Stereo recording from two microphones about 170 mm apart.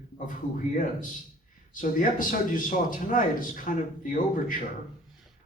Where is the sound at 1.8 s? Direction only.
50° left (ahead or behind).